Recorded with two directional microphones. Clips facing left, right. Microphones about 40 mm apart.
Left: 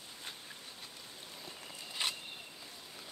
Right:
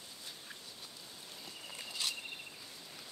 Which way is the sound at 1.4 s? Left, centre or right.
Left.